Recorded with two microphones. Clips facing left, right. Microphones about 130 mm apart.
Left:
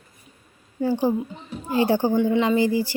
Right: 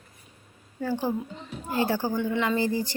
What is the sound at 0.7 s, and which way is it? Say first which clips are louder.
A woman's voice: left 6 dB; 15° left (ahead or behind).